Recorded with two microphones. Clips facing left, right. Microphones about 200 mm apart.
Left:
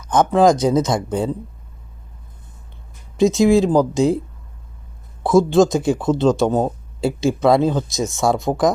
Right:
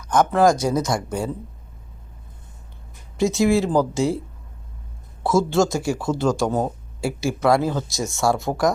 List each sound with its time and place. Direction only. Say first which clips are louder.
0.0 s speech: left 3 dB; 20° left (ahead or behind)
3.2 s speech: left 5 dB; 20° left (ahead or behind)
5.2 s speech: left 5 dB; 15° left (ahead or behind)